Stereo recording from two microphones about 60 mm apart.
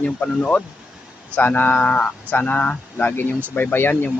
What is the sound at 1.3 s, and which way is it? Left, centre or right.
Speech, left.